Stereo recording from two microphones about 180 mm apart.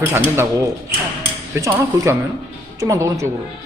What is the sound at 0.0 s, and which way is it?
Speech, 10° right (ahead or behind).